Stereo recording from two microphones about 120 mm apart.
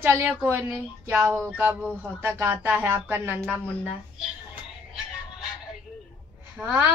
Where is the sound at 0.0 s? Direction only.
15° right (ahead or behind).